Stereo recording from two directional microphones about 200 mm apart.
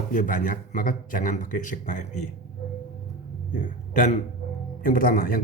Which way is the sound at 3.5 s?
40° left (ahead or behind).